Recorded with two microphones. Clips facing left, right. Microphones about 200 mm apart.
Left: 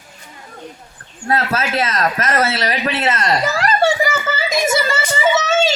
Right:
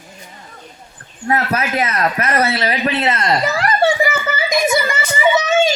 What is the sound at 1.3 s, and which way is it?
A child's voice, 15° right (ahead or behind).